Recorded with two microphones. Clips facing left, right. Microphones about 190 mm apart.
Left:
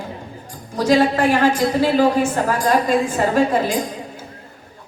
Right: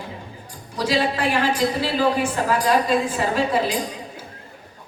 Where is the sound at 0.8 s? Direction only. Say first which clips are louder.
Left 6 dB; 45° left (ahead or behind).